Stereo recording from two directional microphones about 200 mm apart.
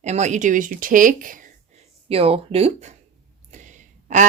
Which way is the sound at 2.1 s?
30° right (ahead or behind).